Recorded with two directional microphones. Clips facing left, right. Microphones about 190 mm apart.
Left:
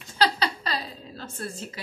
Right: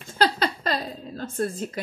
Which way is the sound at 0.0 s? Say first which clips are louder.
Right 2 dB; 50° right (ahead or behind).